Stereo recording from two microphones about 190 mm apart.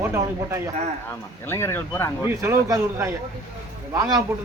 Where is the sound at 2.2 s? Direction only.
15° right (ahead or behind).